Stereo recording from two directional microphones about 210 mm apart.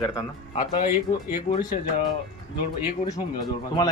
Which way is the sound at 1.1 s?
20° left (ahead or behind).